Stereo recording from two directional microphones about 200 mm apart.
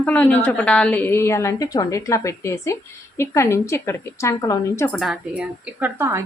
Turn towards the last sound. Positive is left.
turn(degrees=-15)  # may be behind; listen again after turning